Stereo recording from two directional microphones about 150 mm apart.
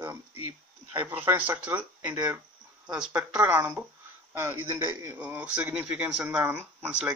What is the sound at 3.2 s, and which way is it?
A man's voice, 10° right (ahead or behind).